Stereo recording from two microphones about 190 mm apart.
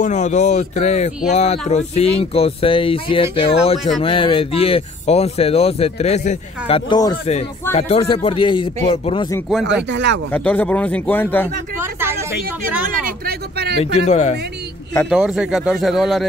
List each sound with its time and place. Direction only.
0.0 s speech: 40° left (ahead or behind)
6.9 s speech: 20° left (ahead or behind)
7.7 s speech: 30° left (ahead or behind)
9.5 s speech: centre (ahead or behind)
9.8 s speech: 70° right (ahead or behind)
10.3 s speech: 10° left (ahead or behind)
11.8 s a woman's voice: 10° right (ahead or behind)
12.8 s speech: 50° right (ahead or behind)
13.7 s speech: 35° left (ahead or behind)
15.0 s speech: 5° right (ahead or behind)